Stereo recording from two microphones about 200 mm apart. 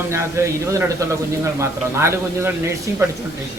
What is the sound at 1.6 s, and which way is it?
Speech, 15° right (ahead or behind).